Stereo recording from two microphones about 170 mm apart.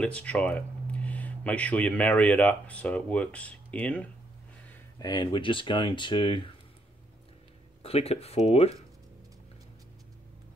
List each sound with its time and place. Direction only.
0.0 s speech: 5° left (ahead or behind)
4.6 s speech: 20° left (ahead or behind)
7.8 s speech: 35° left (ahead or behind)